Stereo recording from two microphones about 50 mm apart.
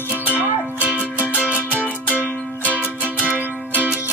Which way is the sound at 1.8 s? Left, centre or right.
Left.